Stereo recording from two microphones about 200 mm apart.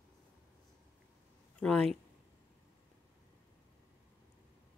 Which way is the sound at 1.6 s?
5° left (ahead or behind).